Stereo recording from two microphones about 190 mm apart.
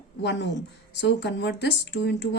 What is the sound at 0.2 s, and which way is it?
Speech, 65° left (ahead or behind).